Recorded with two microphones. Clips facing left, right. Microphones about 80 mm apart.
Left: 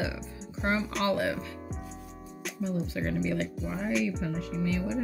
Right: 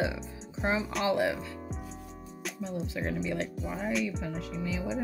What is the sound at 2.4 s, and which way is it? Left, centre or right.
Speech, centre.